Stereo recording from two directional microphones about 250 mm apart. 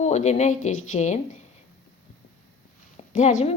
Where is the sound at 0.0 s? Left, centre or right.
Left.